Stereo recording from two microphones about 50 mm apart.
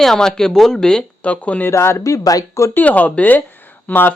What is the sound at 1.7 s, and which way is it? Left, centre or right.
Speech, left.